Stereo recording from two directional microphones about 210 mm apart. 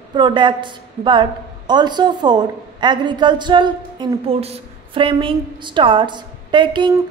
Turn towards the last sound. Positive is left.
turn(degrees=-20)  # may be behind; listen again after turning